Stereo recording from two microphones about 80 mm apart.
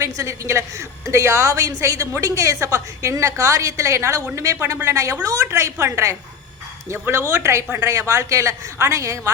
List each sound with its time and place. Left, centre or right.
0.0 s a woman's voice: right